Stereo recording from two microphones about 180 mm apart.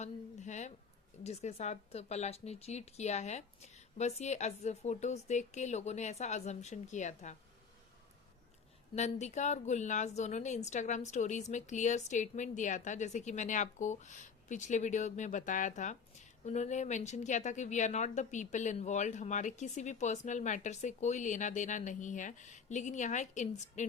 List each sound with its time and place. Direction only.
0.0 s a sound: 40° left (ahead or behind)
1.2 s speech: 35° left (ahead or behind)
9.0 s speech: 40° left (ahead or behind)